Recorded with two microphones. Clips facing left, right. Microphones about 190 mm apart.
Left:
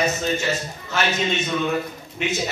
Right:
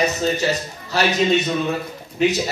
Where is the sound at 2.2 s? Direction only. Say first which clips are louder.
Right 8 dB; 35° right (ahead or behind).